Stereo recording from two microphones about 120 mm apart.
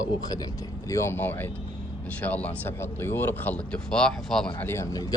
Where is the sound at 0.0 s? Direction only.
30° left (ahead or behind).